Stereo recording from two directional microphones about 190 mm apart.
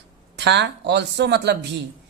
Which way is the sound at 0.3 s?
65° right (ahead or behind).